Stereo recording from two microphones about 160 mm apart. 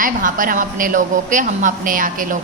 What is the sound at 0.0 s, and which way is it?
A woman's voice, 55° right (ahead or behind).